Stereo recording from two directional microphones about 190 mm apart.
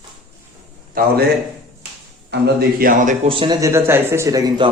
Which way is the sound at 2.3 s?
50° right (ahead or behind).